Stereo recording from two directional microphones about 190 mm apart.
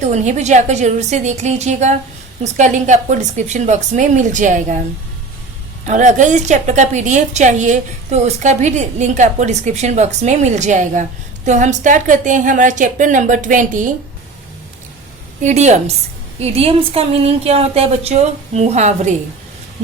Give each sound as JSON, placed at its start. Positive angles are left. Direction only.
{"t": 0.0, "sound": "a woman's voice", "side_deg": -35}
{"t": 5.8, "sound": "a woman's voice", "side_deg": -40}
{"t": 15.4, "sound": "a woman's voice", "side_deg": -40}